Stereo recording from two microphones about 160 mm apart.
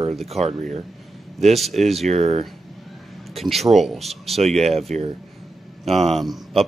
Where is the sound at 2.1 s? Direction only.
40° right (ahead or behind).